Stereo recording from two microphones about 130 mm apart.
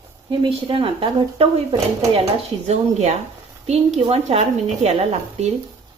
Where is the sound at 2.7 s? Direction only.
60° right (ahead or behind).